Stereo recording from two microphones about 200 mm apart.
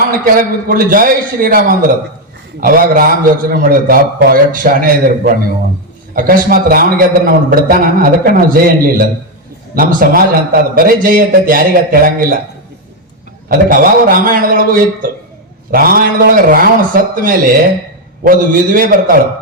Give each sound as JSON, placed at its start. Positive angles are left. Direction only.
{"t": 0.3, "sound": "a man's voice", "side_deg": -45}
{"t": 13.5, "sound": "a man's voice", "side_deg": -45}